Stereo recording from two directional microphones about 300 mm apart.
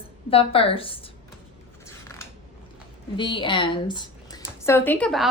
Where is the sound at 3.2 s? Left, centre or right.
Centre.